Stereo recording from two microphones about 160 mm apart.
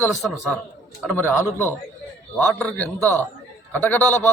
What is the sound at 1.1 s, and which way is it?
A man's voice, 15° left (ahead or behind).